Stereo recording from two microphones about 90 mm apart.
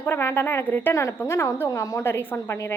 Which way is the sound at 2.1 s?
25° left (ahead or behind).